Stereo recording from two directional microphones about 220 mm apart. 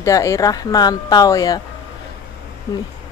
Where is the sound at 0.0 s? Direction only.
15° left (ahead or behind).